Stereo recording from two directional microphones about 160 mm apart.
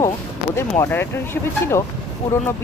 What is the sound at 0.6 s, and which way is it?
Speech, 15° left (ahead or behind).